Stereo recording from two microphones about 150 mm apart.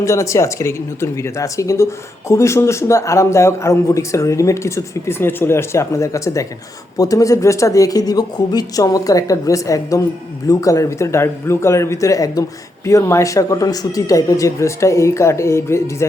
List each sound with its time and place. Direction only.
0.0 s speech: 20° left (ahead or behind)